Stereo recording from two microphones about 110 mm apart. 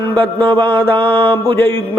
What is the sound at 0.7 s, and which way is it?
Mantra, 10° left (ahead or behind).